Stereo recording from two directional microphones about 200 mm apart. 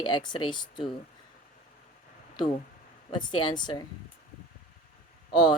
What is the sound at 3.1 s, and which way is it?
Speech, 20° left (ahead or behind).